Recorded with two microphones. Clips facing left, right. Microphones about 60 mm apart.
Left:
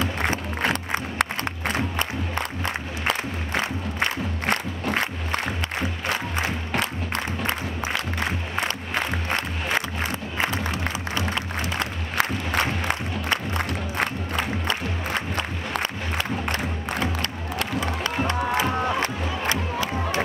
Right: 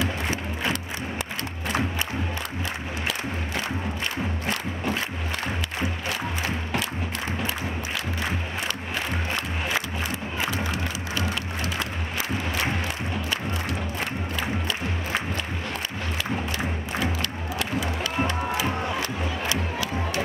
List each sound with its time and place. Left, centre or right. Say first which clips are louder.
0.0 s a sound: left 2 dB; left
0.6 s a sound: left 4 dB; left
1.7 s crowd: even; left
3.1 s music: left 5 dB; left
10.3 s music: left 2 dB; left
12.2 s music: left 5 dB; left
13.9 s crowd: left 4 dB; left
16.4 s music: left 2 dB; left